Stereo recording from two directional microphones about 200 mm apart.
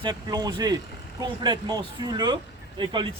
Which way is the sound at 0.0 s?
20° right (ahead or behind).